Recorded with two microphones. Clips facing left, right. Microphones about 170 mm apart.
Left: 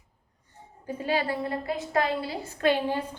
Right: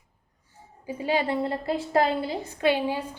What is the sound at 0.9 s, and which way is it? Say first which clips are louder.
A woman's voice: right 2 dB; 15° right (ahead or behind).